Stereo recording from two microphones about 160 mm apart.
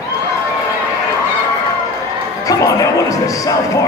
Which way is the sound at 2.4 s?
20° left (ahead or behind).